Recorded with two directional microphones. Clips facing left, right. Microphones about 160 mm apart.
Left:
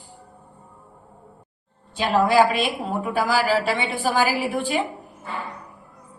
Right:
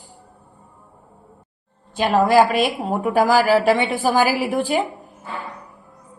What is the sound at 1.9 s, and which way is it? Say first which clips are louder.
Speech: right 3 dB; 45° right (ahead or behind).